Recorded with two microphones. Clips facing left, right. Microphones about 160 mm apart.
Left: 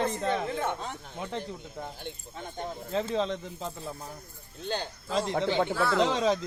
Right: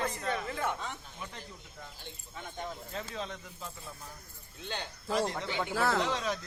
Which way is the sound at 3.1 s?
90° left.